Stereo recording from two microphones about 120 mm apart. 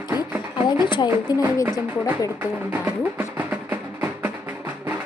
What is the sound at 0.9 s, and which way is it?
Speech, 40° left (ahead or behind).